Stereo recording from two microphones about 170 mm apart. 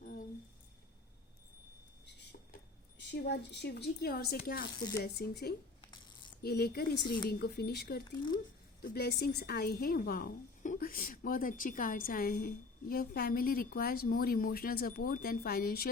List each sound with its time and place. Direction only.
3.0 s a woman's voice: 85° left; by 4.7 s 60° left (ahead or behind)
5.0 s a woman's voice: 75° left (ahead or behind)